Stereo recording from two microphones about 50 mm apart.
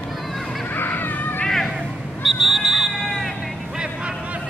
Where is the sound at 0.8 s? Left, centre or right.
Left.